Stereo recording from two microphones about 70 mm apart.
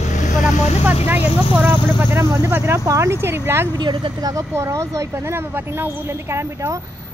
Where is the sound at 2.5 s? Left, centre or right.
Right.